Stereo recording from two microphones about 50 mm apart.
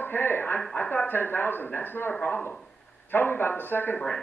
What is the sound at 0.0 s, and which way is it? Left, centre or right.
Speech, left.